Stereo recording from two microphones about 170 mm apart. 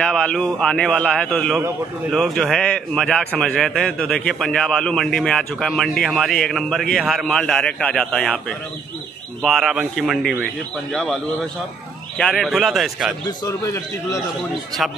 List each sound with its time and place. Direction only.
0.0 s a man's voice: 5° left (ahead or behind)
12.2 s a man's voice: 5° left (ahead or behind)
13.5 s a man's voice: 15° left (ahead or behind)